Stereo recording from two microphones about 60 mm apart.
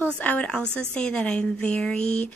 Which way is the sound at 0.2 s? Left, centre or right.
Left.